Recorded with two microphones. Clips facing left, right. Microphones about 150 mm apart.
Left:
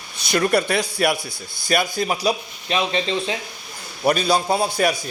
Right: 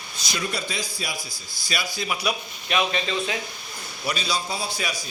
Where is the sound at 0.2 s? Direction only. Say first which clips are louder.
Left 11 dB; 60° left (ahead or behind).